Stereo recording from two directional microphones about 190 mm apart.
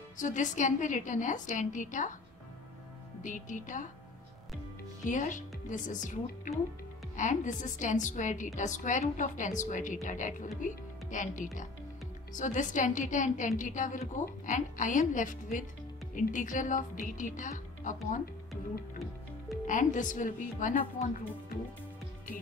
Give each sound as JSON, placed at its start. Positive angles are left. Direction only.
{"t": 0.2, "sound": "a woman's voice", "side_deg": 40}
{"t": 3.2, "sound": "a woman's voice", "side_deg": 40}
{"t": 5.0, "sound": "a woman's voice", "side_deg": 40}
{"t": 19.6, "sound": "a woman's voice", "side_deg": 40}